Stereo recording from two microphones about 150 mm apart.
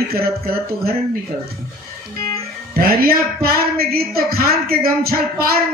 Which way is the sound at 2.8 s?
90° right.